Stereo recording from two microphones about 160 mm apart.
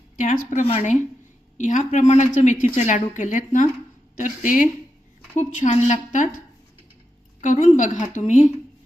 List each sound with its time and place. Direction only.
0.2 s a woman's voice: 55° left (ahead or behind)
7.4 s a woman's voice: 50° left (ahead or behind)